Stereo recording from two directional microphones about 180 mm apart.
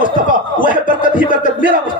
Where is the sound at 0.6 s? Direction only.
45° left (ahead or behind).